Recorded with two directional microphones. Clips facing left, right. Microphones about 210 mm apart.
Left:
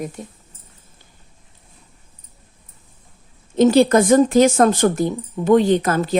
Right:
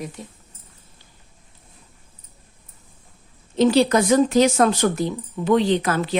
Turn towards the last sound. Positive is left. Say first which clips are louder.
# left 3 dB
turn(degrees=40)  # may be behind; listen again after turning